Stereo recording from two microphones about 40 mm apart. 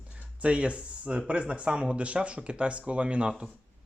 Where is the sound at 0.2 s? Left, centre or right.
Right.